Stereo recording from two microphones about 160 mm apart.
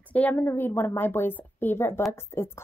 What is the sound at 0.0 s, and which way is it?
Speech, 10° left (ahead or behind).